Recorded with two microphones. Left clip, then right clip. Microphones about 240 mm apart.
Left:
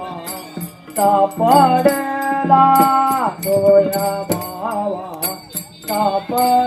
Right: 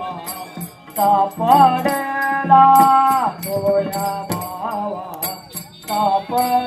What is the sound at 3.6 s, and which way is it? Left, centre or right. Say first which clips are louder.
Music: left 5 dB; right.